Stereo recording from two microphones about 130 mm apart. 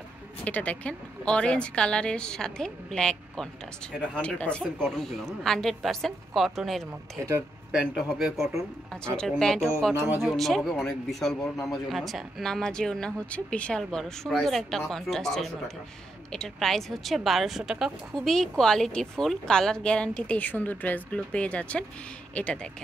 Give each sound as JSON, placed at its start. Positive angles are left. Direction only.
{"t": 0.5, "sound": "a woman's voice", "side_deg": 10}
{"t": 7.2, "sound": "speech", "side_deg": -20}
{"t": 7.7, "sound": "a woman's voice", "side_deg": -5}
{"t": 9.9, "sound": "speech", "side_deg": -15}
{"t": 10.2, "sound": "a woman's voice", "side_deg": 0}